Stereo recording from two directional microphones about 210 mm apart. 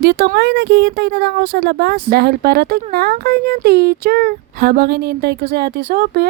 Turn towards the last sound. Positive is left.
turn(degrees=-50)  # may be behind; listen again after turning